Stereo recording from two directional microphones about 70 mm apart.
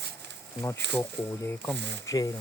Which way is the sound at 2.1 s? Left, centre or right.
Left.